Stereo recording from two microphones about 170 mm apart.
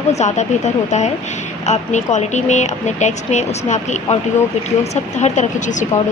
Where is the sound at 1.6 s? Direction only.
45° left (ahead or behind).